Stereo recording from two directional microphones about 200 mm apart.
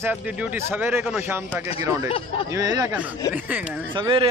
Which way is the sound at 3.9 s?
25° right (ahead or behind).